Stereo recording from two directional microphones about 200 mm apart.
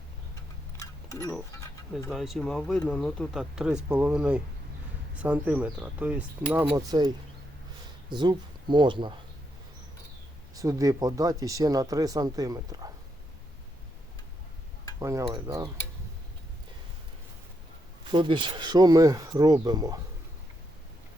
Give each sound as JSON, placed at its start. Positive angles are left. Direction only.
{"t": 0.8, "sound": "a sound", "side_deg": 15}
{"t": 2.0, "sound": "speech", "side_deg": 0}
{"t": 8.1, "sound": "speech", "side_deg": -20}
{"t": 10.5, "sound": "speech", "side_deg": -15}
{"t": 14.9, "sound": "speech", "side_deg": -15}
{"t": 18.1, "sound": "speech", "side_deg": -25}